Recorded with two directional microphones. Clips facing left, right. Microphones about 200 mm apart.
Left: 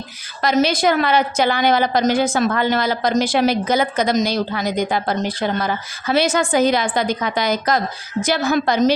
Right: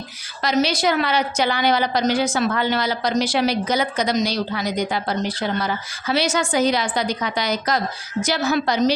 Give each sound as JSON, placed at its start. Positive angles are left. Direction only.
{"t": 0.4, "sound": "a woman's voice", "side_deg": 50}